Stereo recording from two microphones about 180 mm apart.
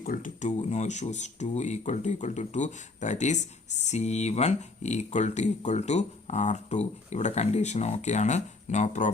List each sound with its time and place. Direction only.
0.0 s speech: 50° left (ahead or behind)